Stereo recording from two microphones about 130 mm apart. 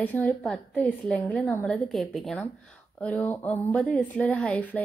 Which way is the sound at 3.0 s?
10° left (ahead or behind).